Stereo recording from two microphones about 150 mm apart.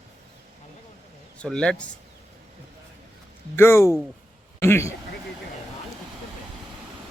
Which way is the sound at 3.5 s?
15° left (ahead or behind).